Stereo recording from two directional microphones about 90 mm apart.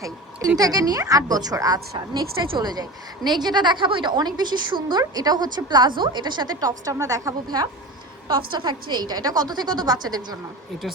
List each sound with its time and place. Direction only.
0.0 s a woman's voice: 45° right (ahead or behind)
8.3 s a woman's voice: 60° right (ahead or behind)